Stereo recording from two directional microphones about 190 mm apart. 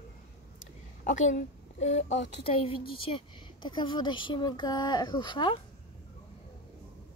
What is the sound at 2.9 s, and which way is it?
A woman's voice, 25° left (ahead or behind).